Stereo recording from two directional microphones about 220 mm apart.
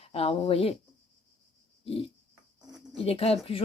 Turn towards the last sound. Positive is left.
turn(degrees=25)  # may be behind; listen again after turning